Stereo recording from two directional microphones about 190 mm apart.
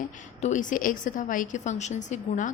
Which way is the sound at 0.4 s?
40° left (ahead or behind).